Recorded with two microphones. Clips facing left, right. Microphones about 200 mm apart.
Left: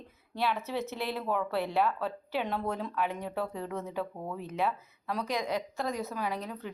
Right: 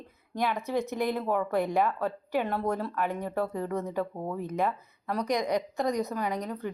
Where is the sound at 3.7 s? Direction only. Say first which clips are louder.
Right 4 dB; 10° left (ahead or behind).